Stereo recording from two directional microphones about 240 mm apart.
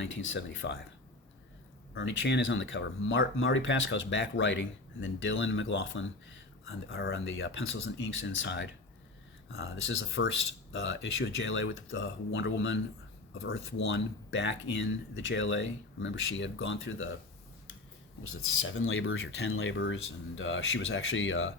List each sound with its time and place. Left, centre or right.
0.0 s speech: left
2.0 s speech: left
18.2 s speech: left